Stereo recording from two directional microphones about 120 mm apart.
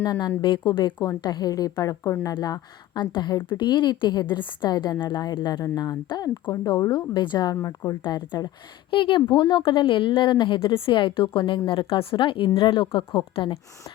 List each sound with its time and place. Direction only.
0.0 s a woman's voice: 35° left (ahead or behind)
7.5 s speech: 25° left (ahead or behind)
8.0 s a woman's voice: 35° left (ahead or behind)